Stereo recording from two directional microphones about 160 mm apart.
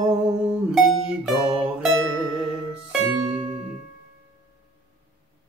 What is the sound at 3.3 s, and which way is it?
Music, 30° right (ahead or behind).